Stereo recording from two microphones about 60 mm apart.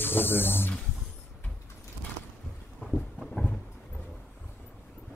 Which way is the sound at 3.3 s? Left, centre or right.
Centre.